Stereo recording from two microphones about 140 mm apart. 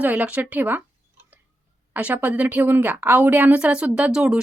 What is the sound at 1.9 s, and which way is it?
Speech, 10° right (ahead or behind).